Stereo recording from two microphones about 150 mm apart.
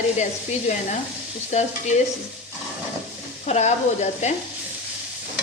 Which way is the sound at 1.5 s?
50° left (ahead or behind).